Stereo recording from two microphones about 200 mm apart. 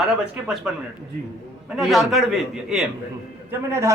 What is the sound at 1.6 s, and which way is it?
A man's voice, centre (ahead or behind).